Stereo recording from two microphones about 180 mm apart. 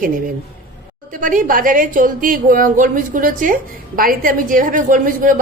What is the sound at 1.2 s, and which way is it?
A woman's voice, 50° right (ahead or behind).